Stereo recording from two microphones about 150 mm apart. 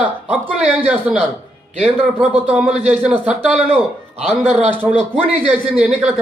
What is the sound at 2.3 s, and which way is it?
Speech, 5° right (ahead or behind).